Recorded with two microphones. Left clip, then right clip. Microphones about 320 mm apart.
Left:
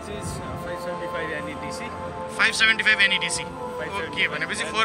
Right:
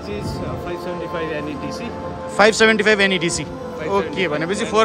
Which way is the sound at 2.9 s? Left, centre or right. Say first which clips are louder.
Right 3 dB; centre.